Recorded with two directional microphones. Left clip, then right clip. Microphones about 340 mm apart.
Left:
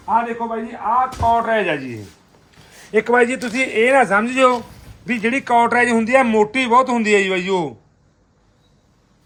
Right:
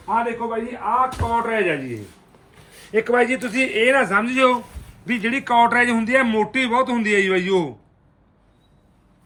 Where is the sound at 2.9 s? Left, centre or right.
Centre.